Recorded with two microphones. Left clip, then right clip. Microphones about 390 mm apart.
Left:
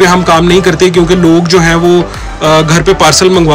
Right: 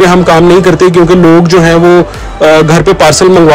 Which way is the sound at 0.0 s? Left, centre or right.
Centre.